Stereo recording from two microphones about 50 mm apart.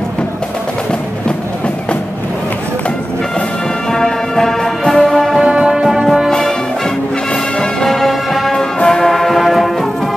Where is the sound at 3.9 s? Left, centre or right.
Centre.